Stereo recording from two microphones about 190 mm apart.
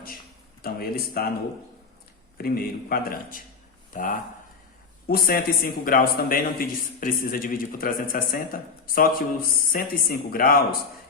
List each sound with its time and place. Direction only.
0.6 s a man's voice: 50° left (ahead or behind)
2.4 s a man's voice: 50° left (ahead or behind)